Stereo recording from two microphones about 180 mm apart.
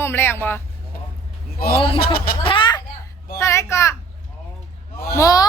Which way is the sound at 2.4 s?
25° left (ahead or behind).